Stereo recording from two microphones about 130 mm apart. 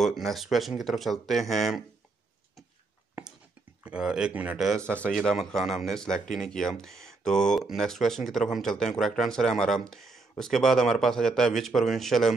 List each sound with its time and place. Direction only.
0.0 s speech: centre (ahead or behind)
3.8 s speech: 5° right (ahead or behind)
4.8 s speech: 10° left (ahead or behind)